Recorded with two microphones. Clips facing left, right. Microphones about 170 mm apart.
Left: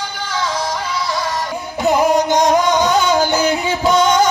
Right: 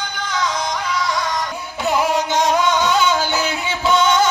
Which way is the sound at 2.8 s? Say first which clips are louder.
Left 2 dB; 40° left (ahead or behind).